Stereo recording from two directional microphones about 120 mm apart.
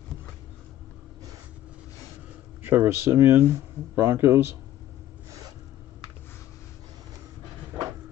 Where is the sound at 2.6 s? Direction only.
20° right (ahead or behind).